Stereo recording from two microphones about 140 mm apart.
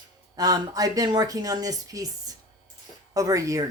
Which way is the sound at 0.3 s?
25° right (ahead or behind).